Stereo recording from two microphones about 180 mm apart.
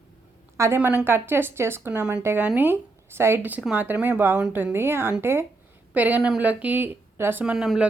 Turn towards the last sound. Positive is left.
turn(degrees=0)  # may be behind; listen again after turning